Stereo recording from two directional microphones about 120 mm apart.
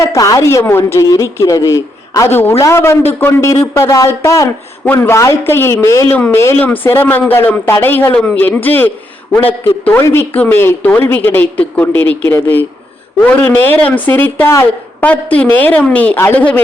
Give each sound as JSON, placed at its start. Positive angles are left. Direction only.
{"t": 0.0, "sound": "a woman's voice", "side_deg": 25}
{"t": 10.0, "sound": "a woman's voice", "side_deg": 20}